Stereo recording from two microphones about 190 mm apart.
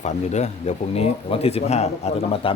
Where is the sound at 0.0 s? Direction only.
35° left (ahead or behind).